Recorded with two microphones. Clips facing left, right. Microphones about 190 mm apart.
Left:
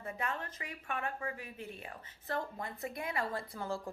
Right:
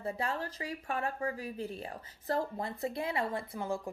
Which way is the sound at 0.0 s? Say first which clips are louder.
Right 4 dB; 30° right (ahead or behind).